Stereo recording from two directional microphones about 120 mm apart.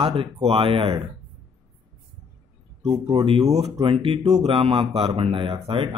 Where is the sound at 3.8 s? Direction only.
45° right (ahead or behind).